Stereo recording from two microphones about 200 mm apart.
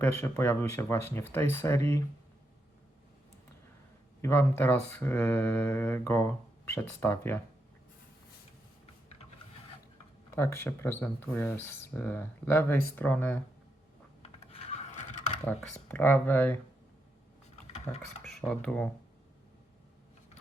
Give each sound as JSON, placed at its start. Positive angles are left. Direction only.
{"t": 0.0, "sound": "speech", "side_deg": 10}
{"t": 4.2, "sound": "speech", "side_deg": 10}
{"t": 10.3, "sound": "speech", "side_deg": 10}
{"t": 14.2, "sound": "computer keyboard", "side_deg": 30}
{"t": 15.4, "sound": "speech", "side_deg": 10}
{"t": 17.7, "sound": "a sound", "side_deg": 35}
{"t": 18.2, "sound": "speech", "side_deg": 0}